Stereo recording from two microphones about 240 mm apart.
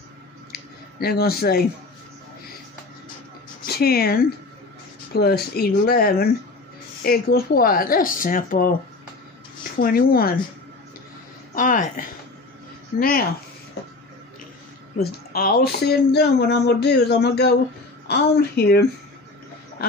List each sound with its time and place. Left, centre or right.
0.5 s a sound: left
3.6 s speech: left
11.5 s speech: left
15.0 s speech: left